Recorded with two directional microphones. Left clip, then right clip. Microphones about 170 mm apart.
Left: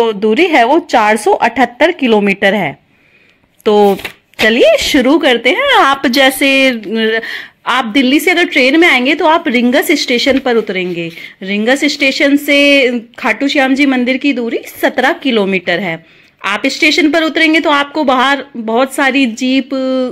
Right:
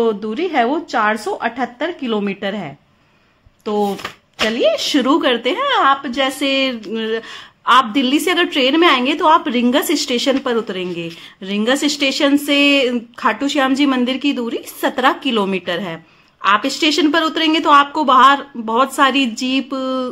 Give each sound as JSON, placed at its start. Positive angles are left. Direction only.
{"t": 0.0, "sound": "a woman's voice", "side_deg": 35}
{"t": 5.8, "sound": "a woman's voice", "side_deg": 60}
{"t": 6.2, "sound": "a woman's voice", "side_deg": 40}